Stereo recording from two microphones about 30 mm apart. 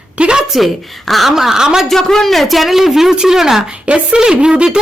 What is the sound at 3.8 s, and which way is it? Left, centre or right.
Speech, right.